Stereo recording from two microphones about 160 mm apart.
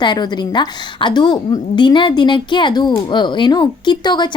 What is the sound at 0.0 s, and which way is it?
A woman's voice, 25° left (ahead or behind).